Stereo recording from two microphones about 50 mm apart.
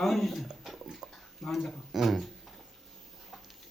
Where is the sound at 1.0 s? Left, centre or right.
Centre.